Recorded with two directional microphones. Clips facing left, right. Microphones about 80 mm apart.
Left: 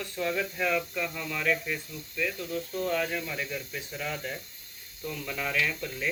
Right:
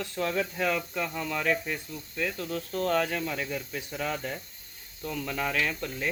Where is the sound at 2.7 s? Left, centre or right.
Right.